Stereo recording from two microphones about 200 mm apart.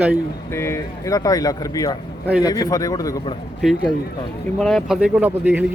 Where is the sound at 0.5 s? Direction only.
10° left (ahead or behind).